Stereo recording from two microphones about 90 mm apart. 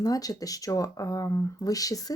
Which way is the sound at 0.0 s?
45° left (ahead or behind).